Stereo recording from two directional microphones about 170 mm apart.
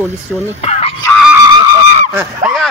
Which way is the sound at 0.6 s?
40° left (ahead or behind).